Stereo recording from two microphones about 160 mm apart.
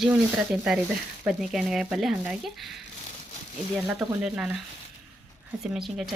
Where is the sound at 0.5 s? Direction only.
5° right (ahead or behind).